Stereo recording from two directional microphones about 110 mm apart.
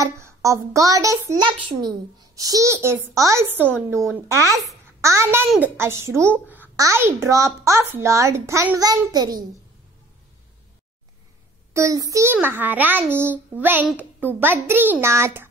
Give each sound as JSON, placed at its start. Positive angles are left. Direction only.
{"t": 0.0, "sound": "speech", "side_deg": -30}
{"t": 1.4, "sound": "a child's voice", "side_deg": -40}
{"t": 11.7, "sound": "a child's voice", "side_deg": -30}